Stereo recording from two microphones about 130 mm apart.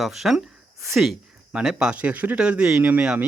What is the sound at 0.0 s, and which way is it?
Speech, centre (ahead or behind).